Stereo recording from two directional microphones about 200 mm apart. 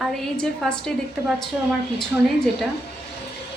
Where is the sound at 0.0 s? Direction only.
Centre (ahead or behind).